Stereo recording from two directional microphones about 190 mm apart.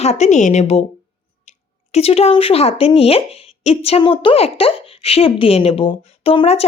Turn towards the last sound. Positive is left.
turn(degrees=30)  # may be behind; listen again after turning